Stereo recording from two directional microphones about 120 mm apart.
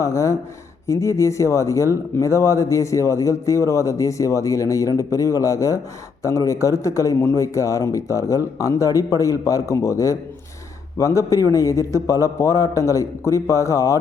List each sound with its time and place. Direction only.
0.0 s speech: 25° left (ahead or behind)